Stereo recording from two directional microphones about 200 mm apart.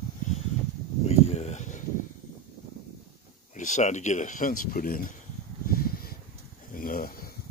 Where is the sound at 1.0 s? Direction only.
30° left (ahead or behind).